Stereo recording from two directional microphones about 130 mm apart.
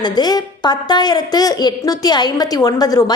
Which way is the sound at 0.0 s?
30° left (ahead or behind).